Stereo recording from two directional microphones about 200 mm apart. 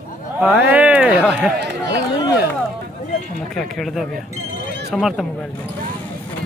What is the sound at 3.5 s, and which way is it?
Speech, centre (ahead or behind).